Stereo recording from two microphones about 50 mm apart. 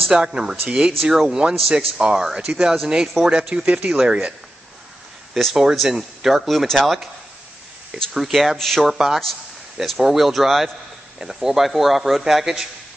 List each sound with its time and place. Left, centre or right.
0.1 s speech: centre
1.6 s speech: centre
2.0 s speech: centre
5.5 s speech: centre
8.9 s speech: centre